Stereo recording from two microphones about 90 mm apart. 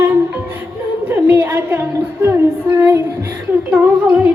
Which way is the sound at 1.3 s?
20° right (ahead or behind).